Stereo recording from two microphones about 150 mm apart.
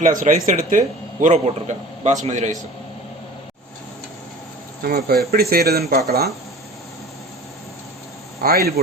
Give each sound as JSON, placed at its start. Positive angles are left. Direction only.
{"t": 0.0, "sound": "a man's voice", "side_deg": -65}
{"t": 4.8, "sound": "speech", "side_deg": -90}
{"t": 8.4, "sound": "speech", "side_deg": -90}